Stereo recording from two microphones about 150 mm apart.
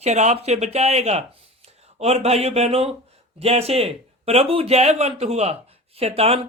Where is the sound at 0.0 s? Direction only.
50° right (ahead or behind).